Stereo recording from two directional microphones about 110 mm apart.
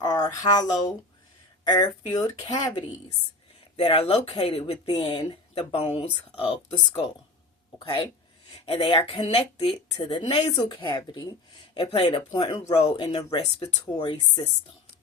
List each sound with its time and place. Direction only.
0.0 s speech: 35° left (ahead or behind)
3.8 s speech: 65° left (ahead or behind)
6.1 s a woman's voice: 50° left (ahead or behind)
7.8 s a woman's voice: 50° left (ahead or behind)
10.3 s a woman's voice: 50° left (ahead or behind)
11.9 s speech: 60° left (ahead or behind)
12.3 s speech: 40° left (ahead or behind)
12.6 s speech: 70° left (ahead or behind)
13.0 s speech: 40° left (ahead or behind)